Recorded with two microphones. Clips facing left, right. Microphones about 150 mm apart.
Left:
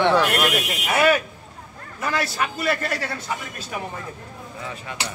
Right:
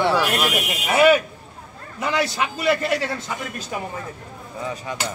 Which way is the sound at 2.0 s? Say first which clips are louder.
Right 2 dB; 20° right (ahead or behind).